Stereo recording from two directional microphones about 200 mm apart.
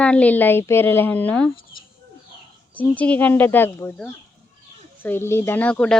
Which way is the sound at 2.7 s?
5° left (ahead or behind).